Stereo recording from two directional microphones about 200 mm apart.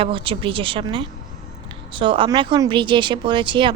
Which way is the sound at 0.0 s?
25° right (ahead or behind).